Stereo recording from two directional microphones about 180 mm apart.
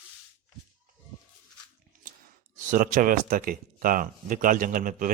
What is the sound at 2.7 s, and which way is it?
Speech, 45° right (ahead or behind).